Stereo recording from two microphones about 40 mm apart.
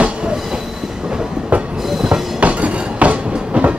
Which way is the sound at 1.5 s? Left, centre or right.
Right.